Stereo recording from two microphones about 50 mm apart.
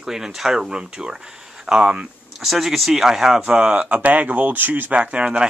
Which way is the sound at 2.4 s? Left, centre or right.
Centre.